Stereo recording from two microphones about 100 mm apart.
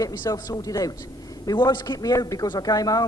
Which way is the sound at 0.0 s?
35° left (ahead or behind).